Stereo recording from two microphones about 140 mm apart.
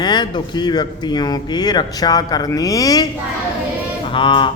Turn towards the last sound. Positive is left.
turn(degrees=35)  # may be behind; listen again after turning